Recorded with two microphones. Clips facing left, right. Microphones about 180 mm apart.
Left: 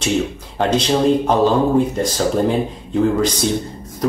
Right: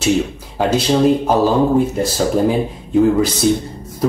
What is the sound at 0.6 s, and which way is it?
Speech, 10° right (ahead or behind).